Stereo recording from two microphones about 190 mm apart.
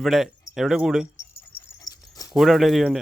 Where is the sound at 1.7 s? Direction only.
20° left (ahead or behind).